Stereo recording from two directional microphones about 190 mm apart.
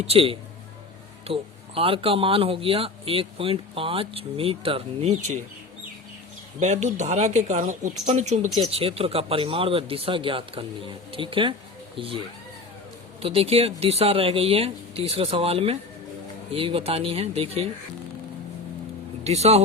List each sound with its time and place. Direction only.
0.1 s a man's voice: 30° right (ahead or behind)
6.6 s a man's voice: 35° right (ahead or behind)
13.2 s a man's voice: 30° right (ahead or behind)
19.2 s speech: 35° right (ahead or behind)